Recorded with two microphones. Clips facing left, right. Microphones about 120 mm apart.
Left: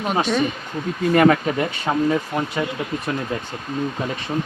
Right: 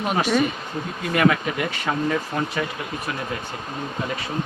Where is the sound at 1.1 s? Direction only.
35° left (ahead or behind).